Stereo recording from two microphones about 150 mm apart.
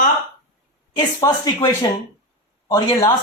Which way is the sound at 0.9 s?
25° left (ahead or behind).